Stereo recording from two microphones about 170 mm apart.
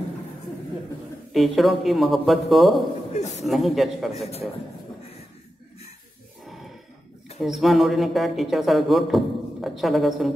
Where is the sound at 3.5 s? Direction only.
Centre (ahead or behind).